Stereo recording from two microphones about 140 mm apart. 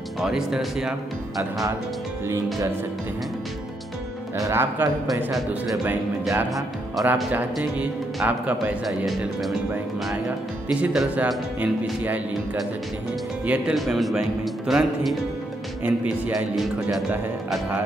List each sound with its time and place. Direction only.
0.2 s speech: 5° right (ahead or behind)
4.4 s speech: 20° right (ahead or behind)
6.3 s speech: 25° right (ahead or behind)
7.3 s speech: 10° right (ahead or behind)
10.7 s speech: 5° right (ahead or behind)
13.5 s speech: 5° right (ahead or behind)